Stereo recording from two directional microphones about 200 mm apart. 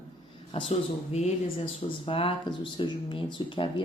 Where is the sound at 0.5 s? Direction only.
30° left (ahead or behind).